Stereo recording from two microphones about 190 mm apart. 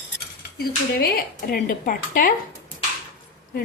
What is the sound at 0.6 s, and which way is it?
Speech, 50° left (ahead or behind).